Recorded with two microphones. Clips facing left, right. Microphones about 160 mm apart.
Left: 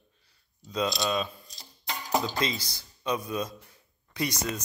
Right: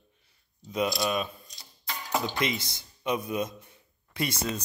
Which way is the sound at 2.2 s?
20° right (ahead or behind).